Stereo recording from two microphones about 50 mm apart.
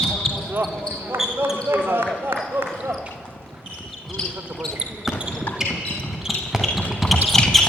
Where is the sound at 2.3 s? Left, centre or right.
Right.